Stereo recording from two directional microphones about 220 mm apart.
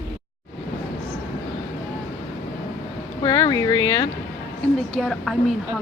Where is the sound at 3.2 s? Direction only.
15° left (ahead or behind).